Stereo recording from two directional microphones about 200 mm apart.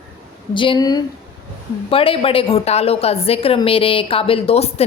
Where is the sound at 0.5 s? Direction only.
25° left (ahead or behind).